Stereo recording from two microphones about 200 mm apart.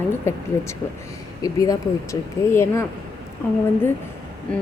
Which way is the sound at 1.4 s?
15° left (ahead or behind).